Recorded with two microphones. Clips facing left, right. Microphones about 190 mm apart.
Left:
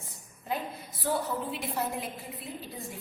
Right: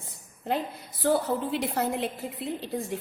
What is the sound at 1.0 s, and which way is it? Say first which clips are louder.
A woman's voice: right 6 dB; 80° right.